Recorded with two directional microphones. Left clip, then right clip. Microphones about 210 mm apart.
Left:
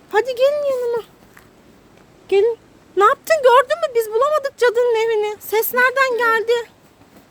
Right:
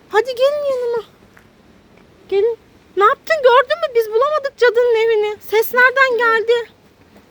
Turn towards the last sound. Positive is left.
turn(degrees=10)  # may be behind; listen again after turning